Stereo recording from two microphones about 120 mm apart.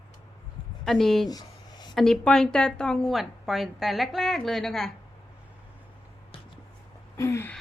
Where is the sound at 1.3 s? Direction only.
35° left (ahead or behind).